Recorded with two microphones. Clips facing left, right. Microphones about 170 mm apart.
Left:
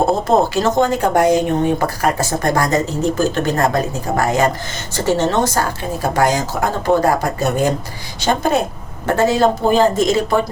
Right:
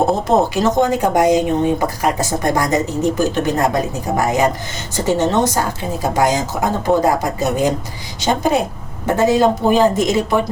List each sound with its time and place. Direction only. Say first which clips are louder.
0.3 s a woman's voice: even; 15° right (ahead or behind)